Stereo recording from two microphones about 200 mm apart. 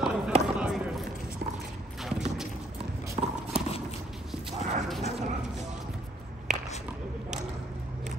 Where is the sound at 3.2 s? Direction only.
35° right (ahead or behind).